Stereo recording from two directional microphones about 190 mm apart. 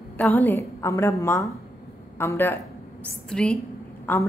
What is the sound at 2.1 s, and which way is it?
A woman's voice, 15° left (ahead or behind).